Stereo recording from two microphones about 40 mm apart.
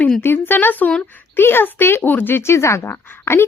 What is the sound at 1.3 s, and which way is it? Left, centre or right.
Speech, left.